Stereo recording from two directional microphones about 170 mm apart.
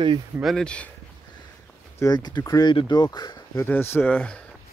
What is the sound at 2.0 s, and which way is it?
Speech, 25° left (ahead or behind).